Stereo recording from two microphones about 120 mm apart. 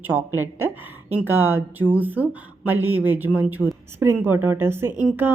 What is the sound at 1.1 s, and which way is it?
Speech, 15° right (ahead or behind).